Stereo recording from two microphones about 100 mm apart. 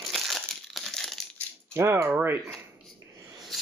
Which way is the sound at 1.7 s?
25° right (ahead or behind).